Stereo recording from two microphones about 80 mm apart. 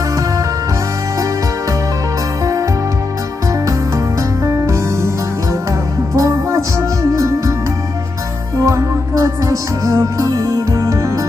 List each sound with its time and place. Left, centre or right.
2.4 s music: right
4.5 s music: right
8.6 s music: right